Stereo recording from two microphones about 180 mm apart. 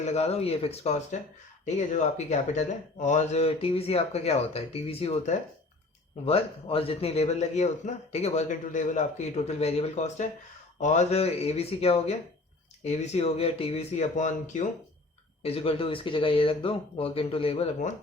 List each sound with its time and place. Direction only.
0.0 s speech: 35° left (ahead or behind)
15.4 s speech: 30° left (ahead or behind)